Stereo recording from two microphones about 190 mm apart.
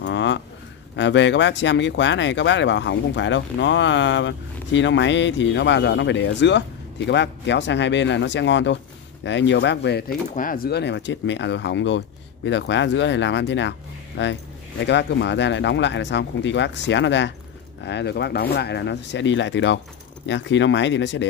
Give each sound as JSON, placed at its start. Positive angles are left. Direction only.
{"t": 0.0, "sound": "a sound", "side_deg": 75}
{"t": 0.9, "sound": "speech", "side_deg": 70}
{"t": 10.3, "sound": "speech", "side_deg": 45}